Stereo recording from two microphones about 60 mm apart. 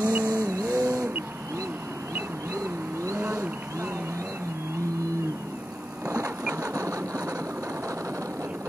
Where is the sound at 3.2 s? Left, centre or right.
Right.